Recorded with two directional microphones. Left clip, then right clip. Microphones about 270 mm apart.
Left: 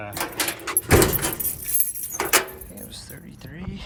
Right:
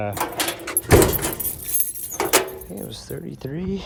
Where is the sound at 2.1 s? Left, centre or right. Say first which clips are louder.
Right 2 dB; right.